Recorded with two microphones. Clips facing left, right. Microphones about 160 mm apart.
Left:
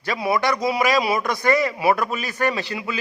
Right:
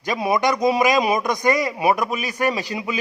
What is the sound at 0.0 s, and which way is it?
A man's voice, 15° right (ahead or behind).